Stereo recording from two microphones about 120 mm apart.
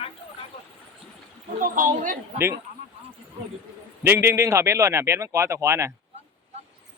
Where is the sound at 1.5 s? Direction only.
90° right.